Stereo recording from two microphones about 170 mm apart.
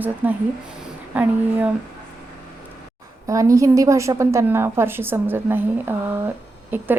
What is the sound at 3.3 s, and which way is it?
Speech, 20° right (ahead or behind).